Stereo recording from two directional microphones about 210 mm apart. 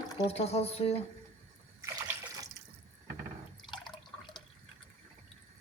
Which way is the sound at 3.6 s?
20° left (ahead or behind).